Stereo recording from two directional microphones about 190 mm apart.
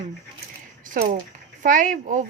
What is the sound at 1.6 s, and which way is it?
Speech, 45° right (ahead or behind).